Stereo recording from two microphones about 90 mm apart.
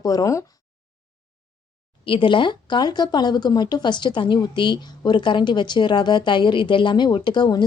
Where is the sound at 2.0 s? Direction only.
70° left (ahead or behind).